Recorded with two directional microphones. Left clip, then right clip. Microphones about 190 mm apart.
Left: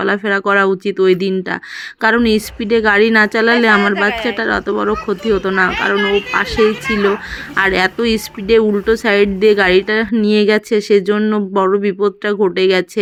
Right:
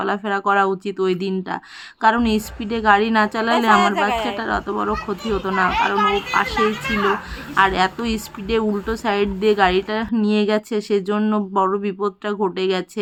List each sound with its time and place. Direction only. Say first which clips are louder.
0.0 s speech: left 5 dB; 20° left (ahead or behind)